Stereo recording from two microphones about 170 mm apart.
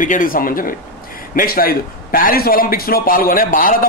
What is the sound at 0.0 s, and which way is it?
A man's voice, 50° left (ahead or behind).